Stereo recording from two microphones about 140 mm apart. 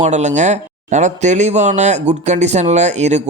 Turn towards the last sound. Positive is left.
turn(degrees=-55)  # may be behind; listen again after turning